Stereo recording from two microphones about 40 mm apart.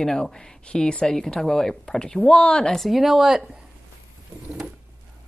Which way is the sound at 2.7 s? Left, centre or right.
Centre.